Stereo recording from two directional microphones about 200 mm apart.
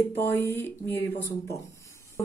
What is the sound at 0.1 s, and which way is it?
A woman's voice, 10° left (ahead or behind).